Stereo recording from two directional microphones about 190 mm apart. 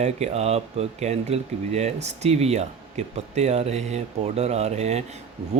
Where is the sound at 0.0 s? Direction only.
35° right (ahead or behind).